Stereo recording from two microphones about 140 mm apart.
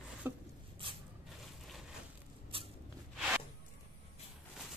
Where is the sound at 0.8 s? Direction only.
40° right (ahead or behind).